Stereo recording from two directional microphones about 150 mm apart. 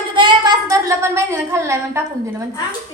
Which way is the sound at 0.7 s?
20° right (ahead or behind).